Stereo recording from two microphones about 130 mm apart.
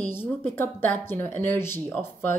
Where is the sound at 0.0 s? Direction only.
15° left (ahead or behind).